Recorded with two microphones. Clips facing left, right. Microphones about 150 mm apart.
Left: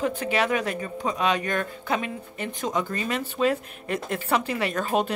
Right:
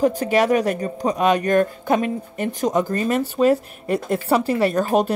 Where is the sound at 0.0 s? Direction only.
40° right (ahead or behind).